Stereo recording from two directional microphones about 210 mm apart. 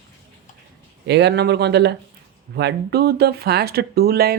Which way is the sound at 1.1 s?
55° right (ahead or behind).